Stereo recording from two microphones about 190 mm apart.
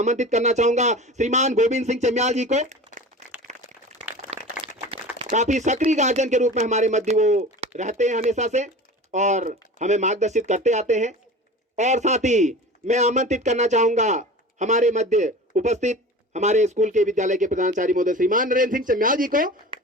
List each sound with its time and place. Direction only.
0.0 s a man's voice: 40° right (ahead or behind)
3.5 s a sound: 40° right (ahead or behind)
5.2 s a man's voice: 40° right (ahead or behind)